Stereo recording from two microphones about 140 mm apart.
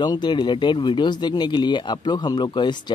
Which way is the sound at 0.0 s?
30° left (ahead or behind).